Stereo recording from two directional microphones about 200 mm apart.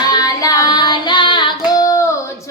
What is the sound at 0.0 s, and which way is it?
Child singing, 20° left (ahead or behind).